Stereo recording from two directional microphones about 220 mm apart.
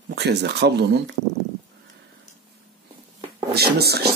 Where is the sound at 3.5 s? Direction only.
45° right (ahead or behind).